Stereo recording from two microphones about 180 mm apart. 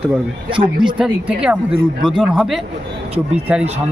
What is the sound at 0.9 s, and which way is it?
Speech, 5° right (ahead or behind).